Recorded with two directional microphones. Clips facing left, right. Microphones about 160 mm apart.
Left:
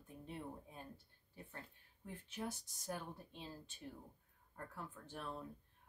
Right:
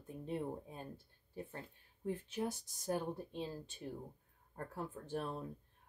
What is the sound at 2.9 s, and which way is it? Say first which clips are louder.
Speech: right 8 dB; 35° right (ahead or behind).